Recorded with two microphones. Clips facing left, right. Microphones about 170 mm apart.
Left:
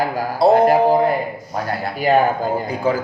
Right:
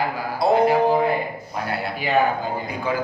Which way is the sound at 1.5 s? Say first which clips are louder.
Left 3 dB; 45° left (ahead or behind).